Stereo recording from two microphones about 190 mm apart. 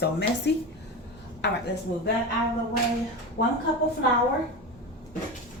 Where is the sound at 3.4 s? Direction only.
55° left (ahead or behind).